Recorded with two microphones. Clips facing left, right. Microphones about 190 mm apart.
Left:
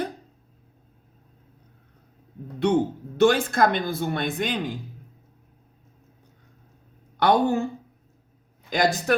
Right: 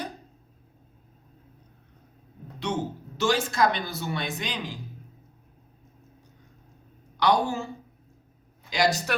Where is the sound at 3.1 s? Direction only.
55° left (ahead or behind).